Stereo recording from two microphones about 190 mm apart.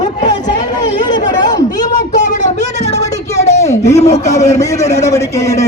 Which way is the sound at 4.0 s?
35° left (ahead or behind).